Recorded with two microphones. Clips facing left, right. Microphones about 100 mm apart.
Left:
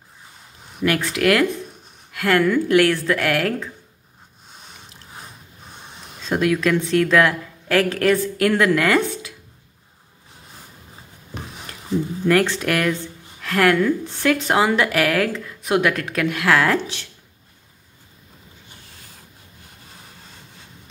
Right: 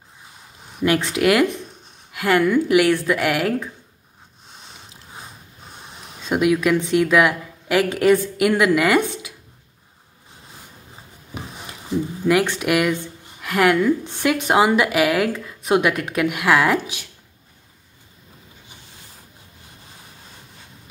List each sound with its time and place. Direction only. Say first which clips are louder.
0.8 s speech: right 1 dB; 20° right (ahead or behind)
6.2 s speech: right 1 dB; 15° right (ahead or behind)
11.3 s speech: right 1 dB; 10° right (ahead or behind)